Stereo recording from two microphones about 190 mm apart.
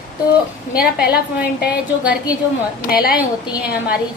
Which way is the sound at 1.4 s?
5° right (ahead or behind).